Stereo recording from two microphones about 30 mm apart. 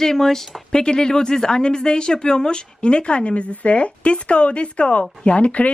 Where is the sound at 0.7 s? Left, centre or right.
Left.